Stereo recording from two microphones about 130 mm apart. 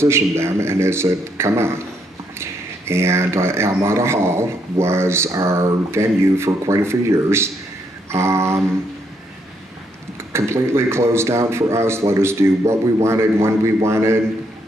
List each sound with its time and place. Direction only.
0.0 s speech: 20° right (ahead or behind)
10.3 s speech: 20° right (ahead or behind)